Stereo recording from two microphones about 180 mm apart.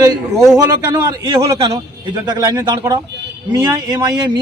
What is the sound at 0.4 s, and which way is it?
Speech, 20° right (ahead or behind).